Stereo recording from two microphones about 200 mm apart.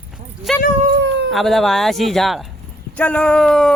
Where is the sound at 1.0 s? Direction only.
60° right (ahead or behind).